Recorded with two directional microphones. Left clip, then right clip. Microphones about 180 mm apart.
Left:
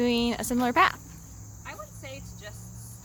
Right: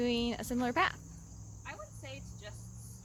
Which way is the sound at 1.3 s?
Centre (ahead or behind).